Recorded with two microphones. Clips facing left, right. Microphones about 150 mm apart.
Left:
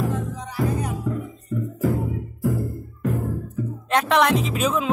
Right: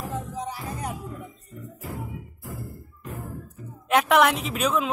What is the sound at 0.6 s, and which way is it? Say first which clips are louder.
Music: left 8 dB; 85° left.